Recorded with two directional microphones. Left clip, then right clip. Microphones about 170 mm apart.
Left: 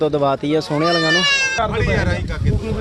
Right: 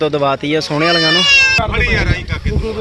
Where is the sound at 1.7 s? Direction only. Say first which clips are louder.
Right 4 dB; 40° left (ahead or behind).